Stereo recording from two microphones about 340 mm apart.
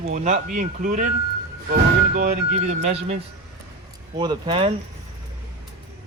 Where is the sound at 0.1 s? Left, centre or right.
Right.